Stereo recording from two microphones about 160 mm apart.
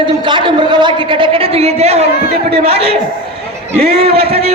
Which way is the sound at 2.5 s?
40° right (ahead or behind).